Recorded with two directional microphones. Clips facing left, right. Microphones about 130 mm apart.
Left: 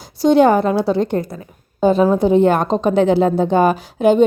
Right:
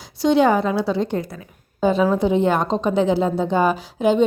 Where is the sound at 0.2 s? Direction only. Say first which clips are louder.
Left 4 dB; 45° left (ahead or behind).